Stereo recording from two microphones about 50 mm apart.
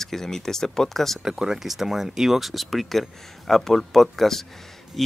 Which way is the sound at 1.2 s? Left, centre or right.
Centre.